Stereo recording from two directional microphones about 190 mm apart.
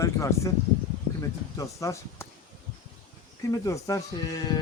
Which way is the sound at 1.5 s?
15° left (ahead or behind).